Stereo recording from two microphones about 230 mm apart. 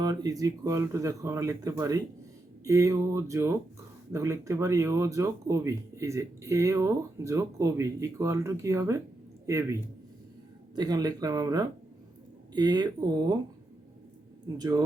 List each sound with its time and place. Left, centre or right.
0.0 s speech: centre
10.8 s speech: centre
14.4 s speech: centre